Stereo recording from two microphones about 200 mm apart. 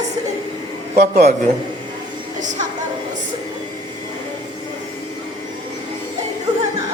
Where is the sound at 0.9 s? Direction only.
50° right (ahead or behind).